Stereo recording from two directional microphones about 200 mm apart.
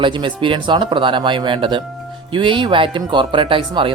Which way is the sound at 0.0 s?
25° right (ahead or behind).